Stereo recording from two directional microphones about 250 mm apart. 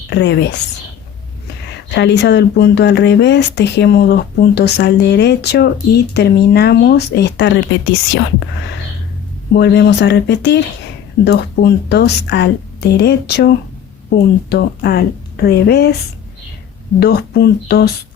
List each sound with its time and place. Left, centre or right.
0.1 s speech: left
1.9 s speech: left
9.5 s a woman's voice: left
17.0 s a woman's voice: left